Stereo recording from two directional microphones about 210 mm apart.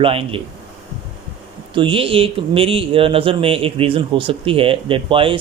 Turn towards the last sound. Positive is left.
turn(degrees=-25)  # may be behind; listen again after turning